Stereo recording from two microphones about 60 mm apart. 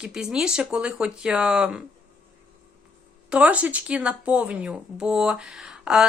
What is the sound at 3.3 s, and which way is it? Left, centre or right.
Speech, right.